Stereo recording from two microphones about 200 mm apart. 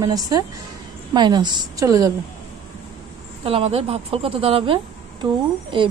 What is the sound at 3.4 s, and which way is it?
A woman's voice, 30° right (ahead or behind).